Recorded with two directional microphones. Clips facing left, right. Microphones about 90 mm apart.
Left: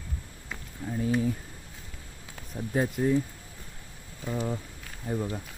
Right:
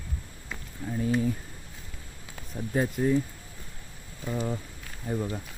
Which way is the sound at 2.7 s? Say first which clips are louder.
Even; 10° left (ahead or behind).